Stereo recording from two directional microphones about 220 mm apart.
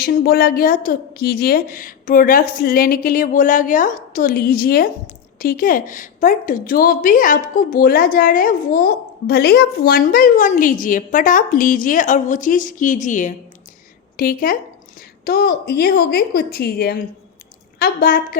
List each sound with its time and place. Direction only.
0.0 s a woman's voice: 45° left (ahead or behind)